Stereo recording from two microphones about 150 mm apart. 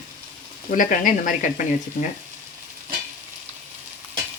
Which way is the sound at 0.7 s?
60° left (ahead or behind).